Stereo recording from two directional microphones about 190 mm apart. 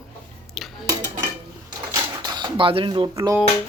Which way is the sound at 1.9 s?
20° right (ahead or behind).